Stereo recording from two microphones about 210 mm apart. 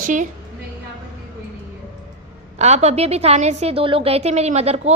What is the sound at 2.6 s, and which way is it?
A woman's voice, 30° right (ahead or behind).